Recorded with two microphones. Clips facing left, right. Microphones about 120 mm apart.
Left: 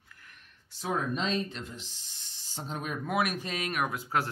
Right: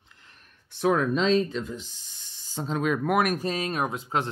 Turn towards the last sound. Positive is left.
turn(degrees=-25)  # may be behind; listen again after turning